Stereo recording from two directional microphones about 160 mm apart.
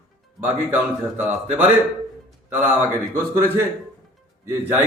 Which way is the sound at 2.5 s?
15° right (ahead or behind).